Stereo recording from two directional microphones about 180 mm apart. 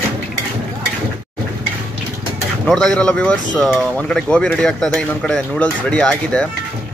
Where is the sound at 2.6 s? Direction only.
5° left (ahead or behind).